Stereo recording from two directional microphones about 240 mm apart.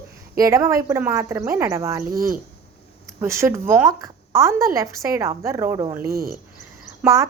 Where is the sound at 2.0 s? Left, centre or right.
Right.